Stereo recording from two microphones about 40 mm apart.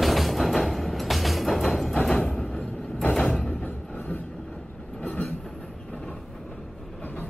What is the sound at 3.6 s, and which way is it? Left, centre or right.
Vehicle, left.